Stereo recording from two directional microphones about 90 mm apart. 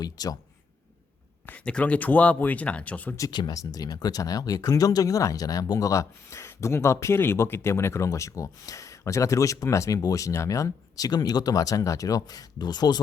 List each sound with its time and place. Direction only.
0.0 s speech: 45° left (ahead or behind)
1.5 s speech: 15° left (ahead or behind)
3.3 s speech: 45° left (ahead or behind)